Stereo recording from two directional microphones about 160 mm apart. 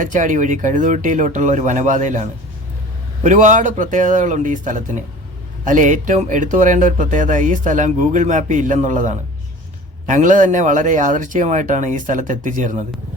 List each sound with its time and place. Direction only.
0.0 s speech: 55° right (ahead or behind)
3.2 s speech: 50° right (ahead or behind)